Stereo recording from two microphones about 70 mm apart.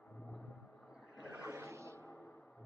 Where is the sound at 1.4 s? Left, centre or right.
Right.